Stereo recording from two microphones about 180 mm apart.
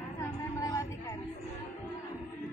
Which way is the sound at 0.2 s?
20° left (ahead or behind).